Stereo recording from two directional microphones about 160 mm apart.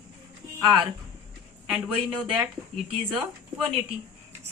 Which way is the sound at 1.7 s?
5° right (ahead or behind).